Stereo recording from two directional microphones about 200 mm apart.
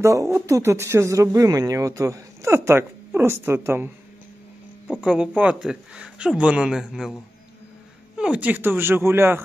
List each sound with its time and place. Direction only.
0.0 s speech: 15° right (ahead or behind)
5.0 s speech: 5° right (ahead or behind)
8.2 s speech: 5° right (ahead or behind)